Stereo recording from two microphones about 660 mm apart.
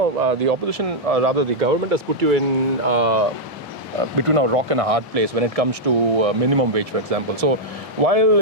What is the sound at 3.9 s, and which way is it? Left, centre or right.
Speech, right.